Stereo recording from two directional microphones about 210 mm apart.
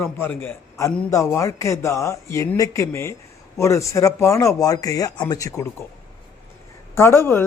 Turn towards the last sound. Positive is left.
turn(degrees=10)  # may be behind; listen again after turning